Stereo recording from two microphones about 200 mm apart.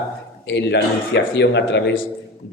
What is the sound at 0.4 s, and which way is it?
Speech, 60° left (ahead or behind).